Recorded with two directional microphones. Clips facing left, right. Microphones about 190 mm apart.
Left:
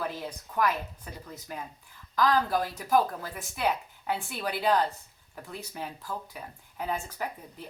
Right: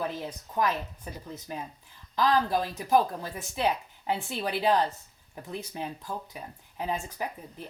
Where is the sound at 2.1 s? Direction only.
25° right (ahead or behind).